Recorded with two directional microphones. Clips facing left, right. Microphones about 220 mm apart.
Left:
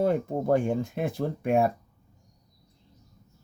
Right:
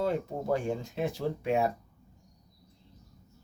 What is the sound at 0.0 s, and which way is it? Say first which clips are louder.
Speech: left 5 dB; 55° left (ahead or behind).